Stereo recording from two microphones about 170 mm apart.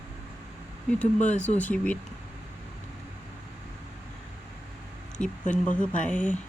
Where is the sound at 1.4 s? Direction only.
10° left (ahead or behind).